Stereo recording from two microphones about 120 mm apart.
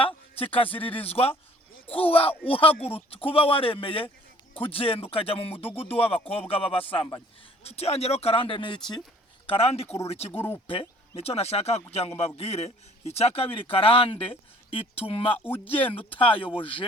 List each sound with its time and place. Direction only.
0.0 s a sound: 50° left (ahead or behind)
1.0 s a man's voice: 55° left (ahead or behind)
7.6 s a man's voice: 60° left (ahead or behind); by 9.0 s 40° left (ahead or behind)
9.5 s a man's voice: 55° left (ahead or behind)
15.4 s speech: 15° left (ahead or behind)
15.9 s a man's voice: 50° left (ahead or behind)